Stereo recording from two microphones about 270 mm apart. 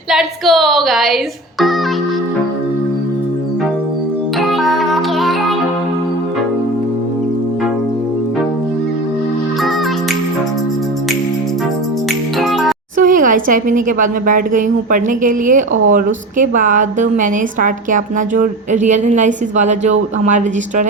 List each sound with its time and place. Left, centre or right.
0.1 s speech: centre
4.4 s music: centre
12.4 s music: centre
13.0 s a woman's voice: right